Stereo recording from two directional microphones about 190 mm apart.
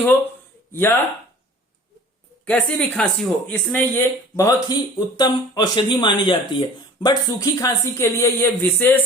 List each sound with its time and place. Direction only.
0.7 s speech: 10° left (ahead or behind)
2.4 s speech: 10° left (ahead or behind)